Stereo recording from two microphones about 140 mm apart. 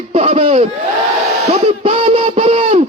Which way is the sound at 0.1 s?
50° right (ahead or behind).